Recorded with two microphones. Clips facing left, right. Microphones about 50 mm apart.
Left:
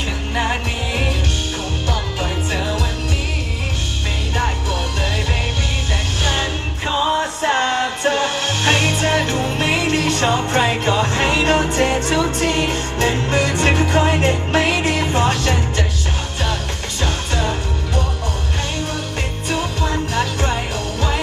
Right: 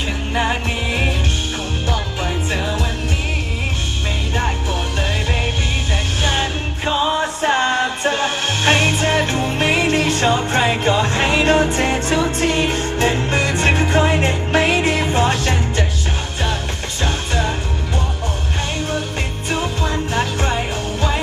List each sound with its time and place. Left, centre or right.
6.2 s music: right
19.5 s music: right